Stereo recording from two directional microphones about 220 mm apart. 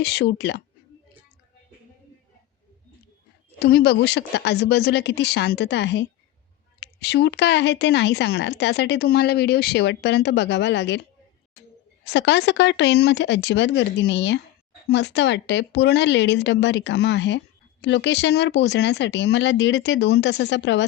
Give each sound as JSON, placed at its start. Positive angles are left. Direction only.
{"t": 0.0, "sound": "speech", "side_deg": 50}
{"t": 3.6, "sound": "speech", "side_deg": 45}
{"t": 12.0, "sound": "speech", "side_deg": 50}